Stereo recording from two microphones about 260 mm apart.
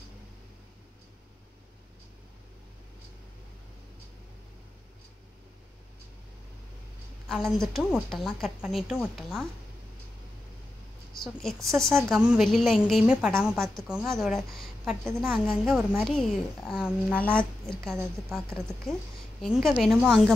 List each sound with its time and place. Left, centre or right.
7.2 s a woman's voice: centre
11.1 s a woman's voice: centre
15.4 s a woman's voice: centre